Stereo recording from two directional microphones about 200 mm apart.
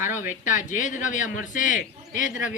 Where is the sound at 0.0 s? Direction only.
40° left (ahead or behind).